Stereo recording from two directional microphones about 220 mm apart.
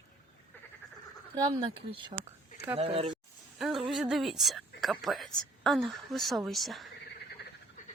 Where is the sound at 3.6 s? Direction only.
Centre (ahead or behind).